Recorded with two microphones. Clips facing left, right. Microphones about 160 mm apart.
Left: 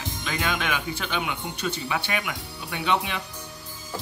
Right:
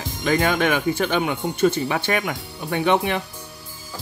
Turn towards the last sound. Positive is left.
turn(degrees=-50)  # may be behind; listen again after turning